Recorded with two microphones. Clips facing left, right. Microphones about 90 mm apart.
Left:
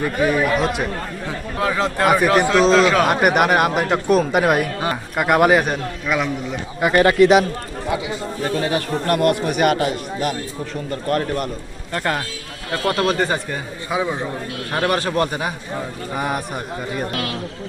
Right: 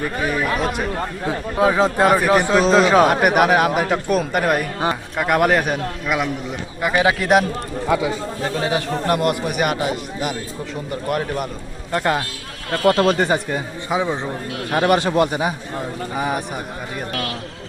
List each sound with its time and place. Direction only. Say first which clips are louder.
0.0 s speech: left 3 dB; centre (ahead or behind)
1.3 s a man's voice: right 5 dB; 15° right (ahead or behind)
2.0 s a man's voice: left 4 dB; centre (ahead or behind)
8.6 s speech: right 3 dB; 20° right (ahead or behind)
9.6 s a man's voice: left 3 dB; 5° right (ahead or behind)
11.9 s a man's voice: right 3 dB; 20° right (ahead or behind)
16.1 s speech: even; centre (ahead or behind)